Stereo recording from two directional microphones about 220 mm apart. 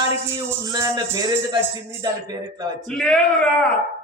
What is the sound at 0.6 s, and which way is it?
Speech, 15° right (ahead or behind).